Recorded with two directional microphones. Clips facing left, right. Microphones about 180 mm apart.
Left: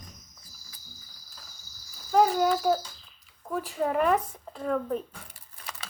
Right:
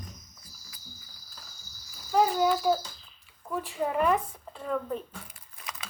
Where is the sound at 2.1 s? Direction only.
50° left (ahead or behind).